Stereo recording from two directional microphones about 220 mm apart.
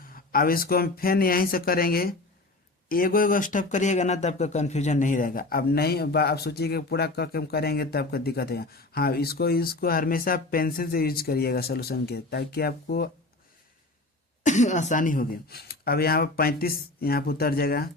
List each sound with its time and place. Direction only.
0.0 s speech: 40° left (ahead or behind)
14.4 s speech: 35° left (ahead or behind)